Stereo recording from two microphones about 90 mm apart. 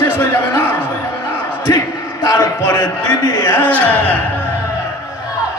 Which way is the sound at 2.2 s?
45° left (ahead or behind).